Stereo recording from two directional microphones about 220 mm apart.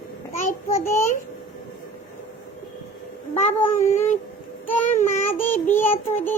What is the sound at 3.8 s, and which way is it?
Speech, 10° left (ahead or behind).